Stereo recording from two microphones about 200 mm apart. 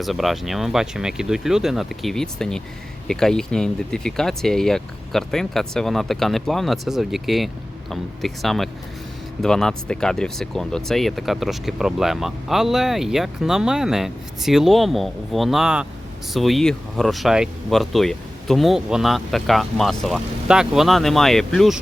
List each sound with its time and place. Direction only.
0.0 s speech: centre (ahead or behind)